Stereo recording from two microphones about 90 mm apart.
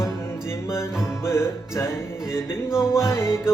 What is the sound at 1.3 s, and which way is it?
Music, 30° left (ahead or behind).